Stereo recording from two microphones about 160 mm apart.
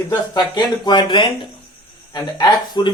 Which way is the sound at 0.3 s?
30° left (ahead or behind).